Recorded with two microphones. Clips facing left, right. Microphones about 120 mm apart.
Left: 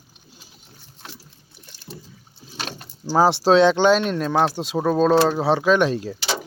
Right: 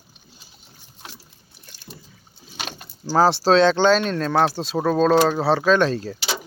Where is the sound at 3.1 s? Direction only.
20° left (ahead or behind).